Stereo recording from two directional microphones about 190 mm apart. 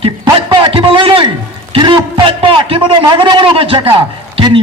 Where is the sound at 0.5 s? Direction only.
25° right (ahead or behind).